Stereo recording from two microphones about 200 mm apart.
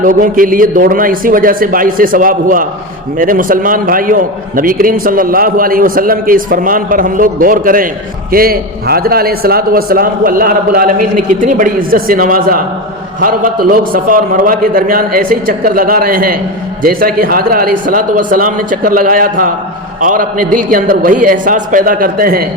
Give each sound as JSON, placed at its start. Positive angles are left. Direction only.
{"t": 0.0, "sound": "a man's voice", "side_deg": -45}